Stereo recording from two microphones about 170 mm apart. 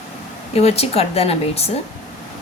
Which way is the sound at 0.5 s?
40° left (ahead or behind).